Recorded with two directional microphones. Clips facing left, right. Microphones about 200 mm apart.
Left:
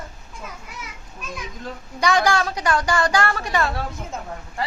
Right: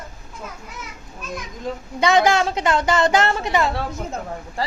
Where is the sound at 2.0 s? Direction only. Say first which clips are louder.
Right 3 dB; 20° right (ahead or behind).